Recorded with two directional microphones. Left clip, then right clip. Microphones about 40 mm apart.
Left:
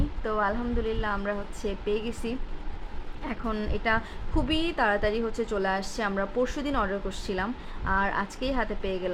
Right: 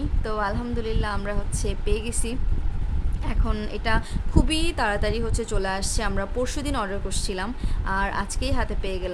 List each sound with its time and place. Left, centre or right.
0.2 s a woman's voice: right
6.0 s a woman's voice: right
6.2 s a woman's voice: centre